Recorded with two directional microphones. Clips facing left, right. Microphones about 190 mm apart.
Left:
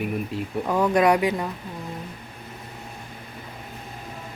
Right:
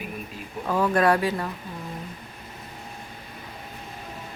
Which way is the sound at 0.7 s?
15° left (ahead or behind).